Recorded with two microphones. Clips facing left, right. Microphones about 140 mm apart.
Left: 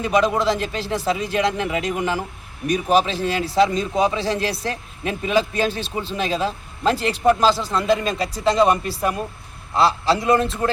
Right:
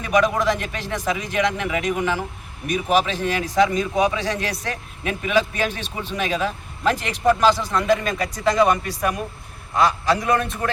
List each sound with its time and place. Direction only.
0.0 s a man's voice: 25° left (ahead or behind)